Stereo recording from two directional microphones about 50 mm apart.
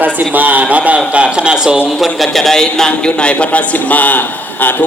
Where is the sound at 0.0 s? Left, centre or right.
Right; by 1.8 s centre.